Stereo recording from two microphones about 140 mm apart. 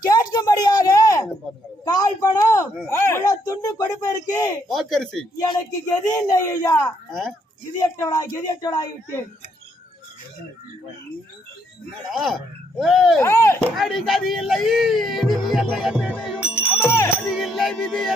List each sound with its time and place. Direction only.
0.0 s a sound: 30° left (ahead or behind)
4.7 s speech: centre (ahead or behind)
6.1 s speech: 25° left (ahead or behind)
7.1 s speech: 5° left (ahead or behind)
7.9 s speech: 25° left (ahead or behind)
12.1 s speech: centre (ahead or behind)
13.2 s speech: 20° left (ahead or behind)
13.7 s speech: centre (ahead or behind)
16.1 s music: 5° right (ahead or behind)
16.7 s music: 20° left (ahead or behind)
17.3 s speech: centre (ahead or behind)